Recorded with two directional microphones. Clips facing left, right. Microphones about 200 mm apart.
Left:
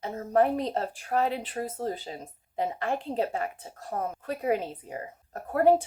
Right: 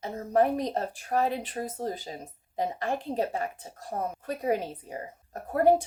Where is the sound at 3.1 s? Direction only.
40° right (ahead or behind).